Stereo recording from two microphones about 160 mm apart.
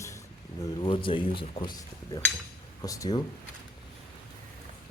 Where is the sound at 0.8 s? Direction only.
30° left (ahead or behind).